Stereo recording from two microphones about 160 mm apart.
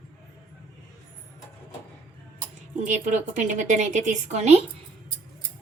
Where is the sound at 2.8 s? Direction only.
50° right (ahead or behind).